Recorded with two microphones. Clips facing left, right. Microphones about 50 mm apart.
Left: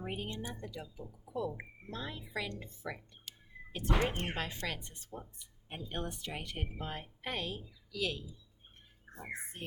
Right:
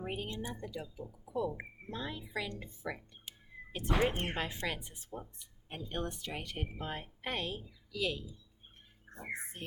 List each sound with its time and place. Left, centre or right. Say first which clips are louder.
0.0 s a woman's voice: right 1 dB; centre
4.0 s speech: right 3 dB; right
4.6 s speech: right 2 dB; centre
5.6 s speech: right 1 dB; centre
9.4 s speech: even; centre